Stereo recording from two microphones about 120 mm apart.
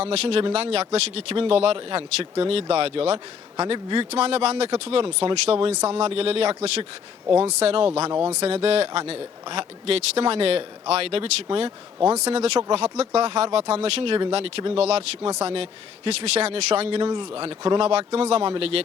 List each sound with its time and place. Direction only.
0.0 s a man's voice: 55° right (ahead or behind)
8.1 s speech: 30° right (ahead or behind)
8.4 s a man's voice: 55° right (ahead or behind)